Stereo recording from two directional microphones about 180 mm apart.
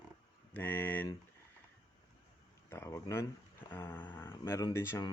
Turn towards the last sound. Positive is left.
turn(degrees=15)  # may be behind; listen again after turning